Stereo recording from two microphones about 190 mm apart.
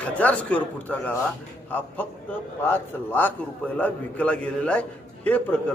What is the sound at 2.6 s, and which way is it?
A man's voice, 10° left (ahead or behind).